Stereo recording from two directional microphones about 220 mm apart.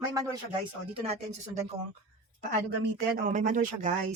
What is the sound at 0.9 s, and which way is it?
Speech, 30° right (ahead or behind).